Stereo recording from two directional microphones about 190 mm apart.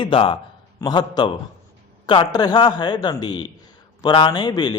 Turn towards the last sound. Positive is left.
turn(degrees=20)  # may be behind; listen again after turning